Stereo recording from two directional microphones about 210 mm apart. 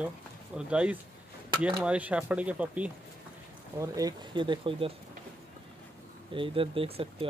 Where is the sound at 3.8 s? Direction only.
15° right (ahead or behind).